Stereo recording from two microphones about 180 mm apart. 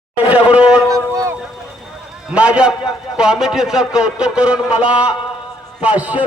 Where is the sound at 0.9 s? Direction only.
20° right (ahead or behind).